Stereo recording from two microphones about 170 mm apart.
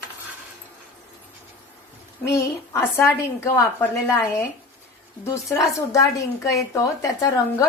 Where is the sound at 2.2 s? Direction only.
15° left (ahead or behind).